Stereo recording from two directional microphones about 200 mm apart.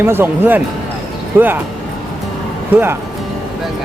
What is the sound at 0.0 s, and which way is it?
Speech, 10° right (ahead or behind).